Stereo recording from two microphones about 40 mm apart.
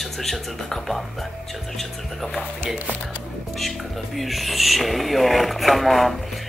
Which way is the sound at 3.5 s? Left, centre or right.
Centre.